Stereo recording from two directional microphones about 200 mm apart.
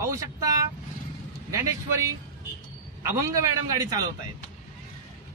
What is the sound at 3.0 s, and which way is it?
Speech, 15° right (ahead or behind).